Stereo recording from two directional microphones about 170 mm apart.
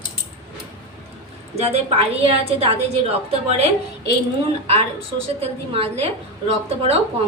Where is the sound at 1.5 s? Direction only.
35° right (ahead or behind).